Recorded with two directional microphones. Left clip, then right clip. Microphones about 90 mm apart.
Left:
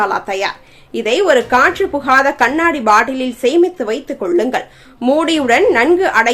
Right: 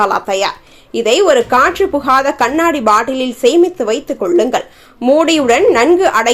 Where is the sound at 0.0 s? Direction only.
40° right (ahead or behind).